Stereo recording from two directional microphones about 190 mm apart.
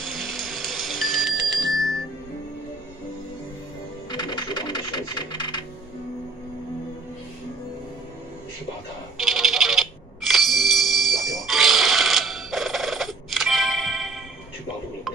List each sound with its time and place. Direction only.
0.0 s ringtone: centre (ahead or behind)
4.1 s music: 20° left (ahead or behind)
9.2 s music: centre (ahead or behind)